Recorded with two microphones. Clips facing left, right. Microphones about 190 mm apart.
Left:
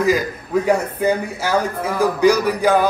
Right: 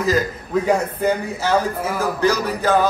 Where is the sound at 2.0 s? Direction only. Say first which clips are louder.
Left 5 dB; 15° left (ahead or behind).